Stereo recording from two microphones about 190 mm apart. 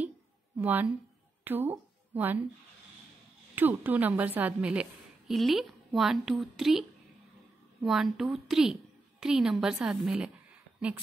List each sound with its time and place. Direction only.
0.6 s a woman's voice: 10° right (ahead or behind)
1.4 s a sound: 10° right (ahead or behind)
3.5 s a woman's voice: 10° right (ahead or behind)